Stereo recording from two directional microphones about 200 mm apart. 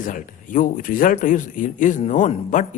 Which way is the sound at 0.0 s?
40° left (ahead or behind).